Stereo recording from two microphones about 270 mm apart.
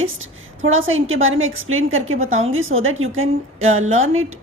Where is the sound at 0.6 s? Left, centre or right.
Right.